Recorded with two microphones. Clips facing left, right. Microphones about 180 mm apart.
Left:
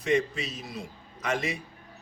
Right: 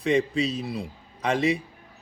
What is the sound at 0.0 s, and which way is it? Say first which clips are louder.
A man's voice: right 4 dB; 30° right (ahead or behind).